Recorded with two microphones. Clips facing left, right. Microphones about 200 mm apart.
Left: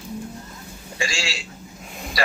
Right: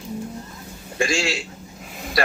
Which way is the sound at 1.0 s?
55° right (ahead or behind).